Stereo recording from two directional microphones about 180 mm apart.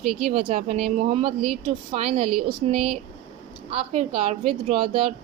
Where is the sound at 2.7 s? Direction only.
Centre (ahead or behind).